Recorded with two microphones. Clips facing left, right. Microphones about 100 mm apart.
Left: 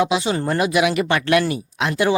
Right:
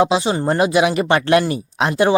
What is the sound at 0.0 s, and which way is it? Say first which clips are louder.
Speech: right 3 dB; 30° right (ahead or behind).